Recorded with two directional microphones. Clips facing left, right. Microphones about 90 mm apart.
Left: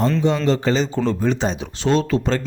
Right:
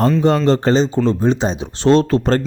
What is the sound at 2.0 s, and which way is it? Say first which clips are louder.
Speech: right 5 dB; 50° right (ahead or behind).